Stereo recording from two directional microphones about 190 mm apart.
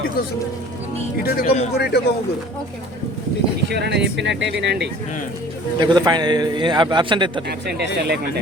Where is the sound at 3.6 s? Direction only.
60° right (ahead or behind).